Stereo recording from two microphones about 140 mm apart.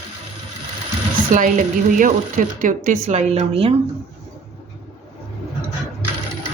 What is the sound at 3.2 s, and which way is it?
Speech, 50° right (ahead or behind).